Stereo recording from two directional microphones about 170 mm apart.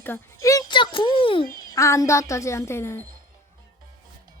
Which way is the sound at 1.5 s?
20° left (ahead or behind).